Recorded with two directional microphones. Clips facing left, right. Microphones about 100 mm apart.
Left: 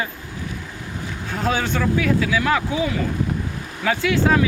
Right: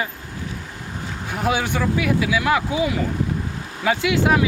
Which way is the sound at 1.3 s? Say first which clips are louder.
Even; 15° right (ahead or behind).